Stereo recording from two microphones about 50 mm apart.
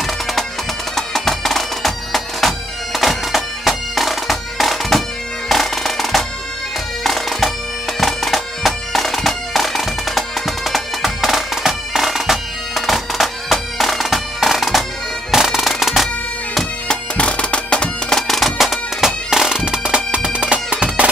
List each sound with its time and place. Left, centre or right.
0.0 s music: centre
0.9 s bagpipes: centre
16.8 s bagpipes: centre
18.2 s bagpipes: centre; by 21.1 s right